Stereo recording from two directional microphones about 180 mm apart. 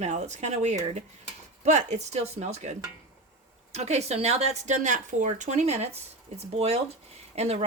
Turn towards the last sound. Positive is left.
turn(degrees=-35)  # may be behind; listen again after turning